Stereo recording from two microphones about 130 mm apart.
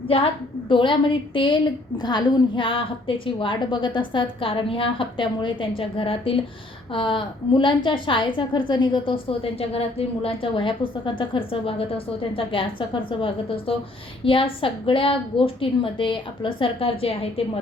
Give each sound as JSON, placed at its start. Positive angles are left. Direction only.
{"t": 0.7, "sound": "a woman's voice", "side_deg": 40}